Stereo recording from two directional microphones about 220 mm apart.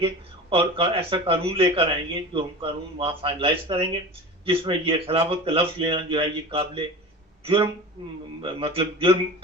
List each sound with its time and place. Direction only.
0.5 s a man's voice: 25° right (ahead or behind)